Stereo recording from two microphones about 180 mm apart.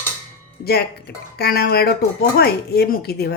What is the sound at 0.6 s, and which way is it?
Speech, 60° left (ahead or behind).